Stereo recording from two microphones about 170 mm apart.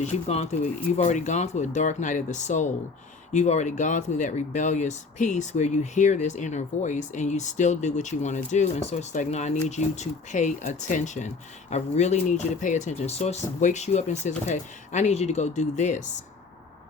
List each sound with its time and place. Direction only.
0.0 s speech: 40° left (ahead or behind)